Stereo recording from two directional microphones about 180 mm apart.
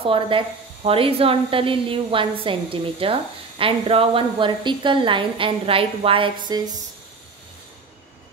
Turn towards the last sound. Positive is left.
turn(degrees=-25)  # may be behind; listen again after turning